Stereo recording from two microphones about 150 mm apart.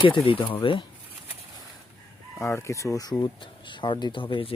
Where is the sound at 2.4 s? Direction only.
15° left (ahead or behind).